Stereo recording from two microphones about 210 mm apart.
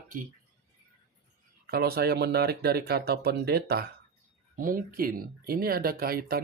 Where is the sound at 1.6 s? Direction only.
45° right (ahead or behind).